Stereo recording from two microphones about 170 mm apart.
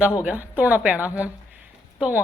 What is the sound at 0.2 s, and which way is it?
A woman's voice, 10° right (ahead or behind).